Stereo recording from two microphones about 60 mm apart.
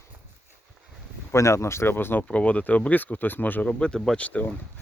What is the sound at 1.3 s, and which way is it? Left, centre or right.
Speech, left.